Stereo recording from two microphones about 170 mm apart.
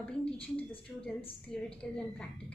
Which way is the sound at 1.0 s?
10° left (ahead or behind).